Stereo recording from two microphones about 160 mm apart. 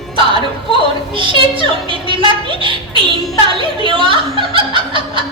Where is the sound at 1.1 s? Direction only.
30° right (ahead or behind).